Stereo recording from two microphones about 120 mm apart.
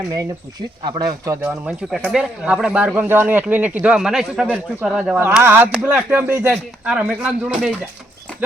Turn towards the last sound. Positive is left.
turn(degrees=-5)  # may be behind; listen again after turning